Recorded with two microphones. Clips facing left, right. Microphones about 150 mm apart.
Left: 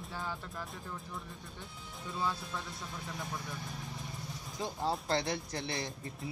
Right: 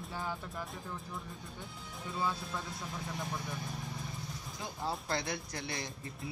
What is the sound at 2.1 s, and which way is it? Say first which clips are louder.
Speech: even; 5° right (ahead or behind).